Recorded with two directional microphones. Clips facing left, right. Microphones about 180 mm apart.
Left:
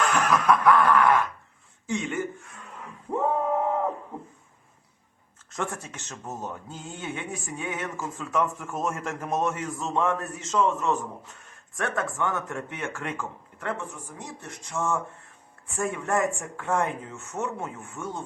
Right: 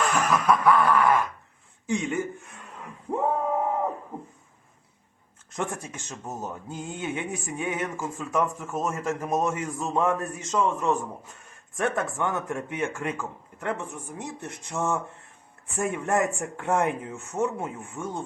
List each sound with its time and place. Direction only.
0.0 s a sound: 5° right (ahead or behind)
1.9 s speech: 15° right (ahead or behind)
3.6 s a sound: 5° right (ahead or behind)
5.5 s speech: 15° right (ahead or behind)
13.0 s speech: 5° right (ahead or behind)
14.2 s speech: 20° right (ahead or behind)